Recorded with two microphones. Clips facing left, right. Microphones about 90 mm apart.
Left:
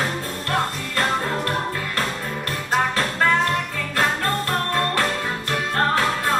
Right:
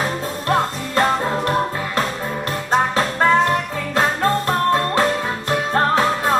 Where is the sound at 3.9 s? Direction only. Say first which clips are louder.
Right 4 dB; 20° right (ahead or behind).